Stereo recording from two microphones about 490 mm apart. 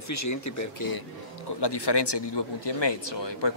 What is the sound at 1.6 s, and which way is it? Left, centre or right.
Speech, left.